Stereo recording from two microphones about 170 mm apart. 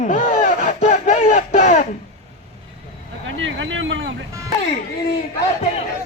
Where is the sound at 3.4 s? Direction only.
90° right.